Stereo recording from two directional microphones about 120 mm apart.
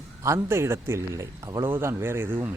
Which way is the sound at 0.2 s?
25° right (ahead or behind).